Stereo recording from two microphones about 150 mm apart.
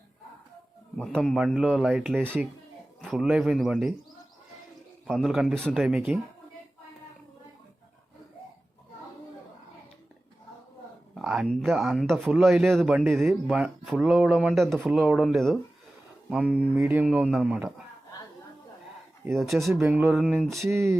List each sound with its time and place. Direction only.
0.9 s speech: 5° left (ahead or behind)
5.0 s speech: centre (ahead or behind)
11.1 s speech: centre (ahead or behind)
19.4 s speech: centre (ahead or behind)
20.6 s music: 20° right (ahead or behind)